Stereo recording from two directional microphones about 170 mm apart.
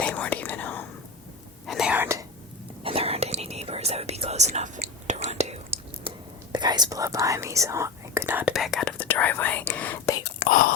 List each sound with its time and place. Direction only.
0.0 s whispering: 10° left (ahead or behind)
1.6 s whispering: centre (ahead or behind)
2.8 s whispering: 35° right (ahead or behind); by 10.2 s 10° left (ahead or behind)
10.4 s whispering: 55° left (ahead or behind)